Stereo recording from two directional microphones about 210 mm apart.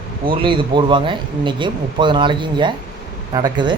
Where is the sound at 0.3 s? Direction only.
25° right (ahead or behind).